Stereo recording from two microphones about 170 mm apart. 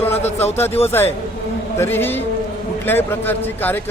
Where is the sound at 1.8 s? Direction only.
15° left (ahead or behind).